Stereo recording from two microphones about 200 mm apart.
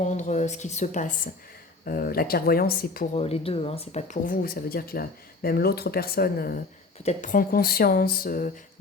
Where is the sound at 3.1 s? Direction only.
30° left (ahead or behind); by 6.6 s 50° left (ahead or behind).